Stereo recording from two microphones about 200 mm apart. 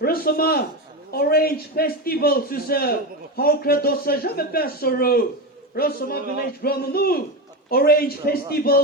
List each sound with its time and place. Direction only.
0.0 s a man's voice: 50° left (ahead or behind)